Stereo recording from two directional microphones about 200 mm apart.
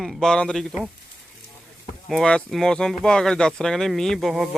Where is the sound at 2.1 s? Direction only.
5° left (ahead or behind).